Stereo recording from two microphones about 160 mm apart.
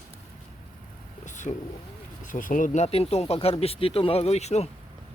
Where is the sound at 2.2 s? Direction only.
55° left (ahead or behind).